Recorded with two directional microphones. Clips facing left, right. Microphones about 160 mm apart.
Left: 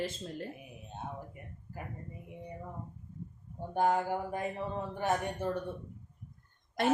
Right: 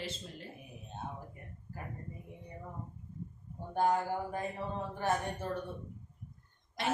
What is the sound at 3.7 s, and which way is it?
Speech, 15° left (ahead or behind).